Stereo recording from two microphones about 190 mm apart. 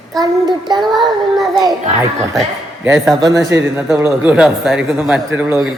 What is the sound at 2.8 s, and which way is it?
Speech, 5° right (ahead or behind).